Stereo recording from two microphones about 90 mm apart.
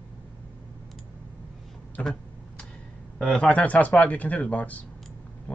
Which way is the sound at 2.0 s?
15° left (ahead or behind).